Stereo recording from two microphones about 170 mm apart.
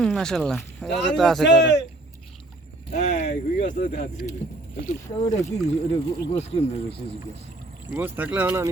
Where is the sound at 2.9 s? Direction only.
45° left (ahead or behind).